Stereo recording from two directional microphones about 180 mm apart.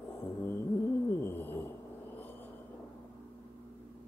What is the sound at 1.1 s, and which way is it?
Bird, 15° left (ahead or behind).